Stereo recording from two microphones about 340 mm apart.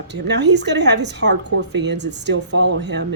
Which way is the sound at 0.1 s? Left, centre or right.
Right.